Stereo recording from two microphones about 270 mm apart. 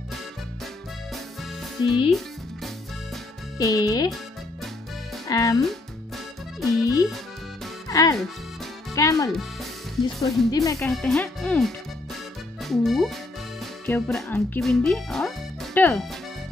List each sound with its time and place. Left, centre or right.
1.8 s speech: centre
2.0 s music: centre
3.5 s speech: centre
5.3 s speech: centre
5.6 s music: centre
6.8 s music: centre
7.9 s speech: centre
10.1 s speech: centre
10.5 s speech: centre
10.9 s speech: centre